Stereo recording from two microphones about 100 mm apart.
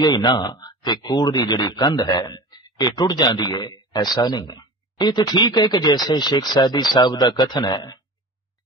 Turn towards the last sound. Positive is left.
turn(degrees=45)  # may be behind; listen again after turning